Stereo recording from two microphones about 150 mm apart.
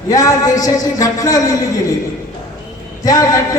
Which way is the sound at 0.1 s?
20° left (ahead or behind).